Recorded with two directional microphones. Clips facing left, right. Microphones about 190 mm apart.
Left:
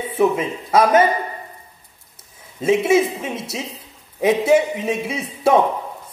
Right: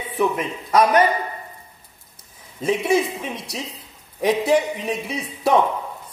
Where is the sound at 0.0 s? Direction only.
25° left (ahead or behind).